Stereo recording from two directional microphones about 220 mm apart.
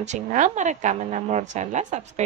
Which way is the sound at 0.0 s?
35° right (ahead or behind).